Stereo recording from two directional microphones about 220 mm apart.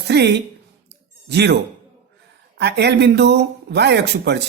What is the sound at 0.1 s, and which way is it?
Speech, 50° right (ahead or behind).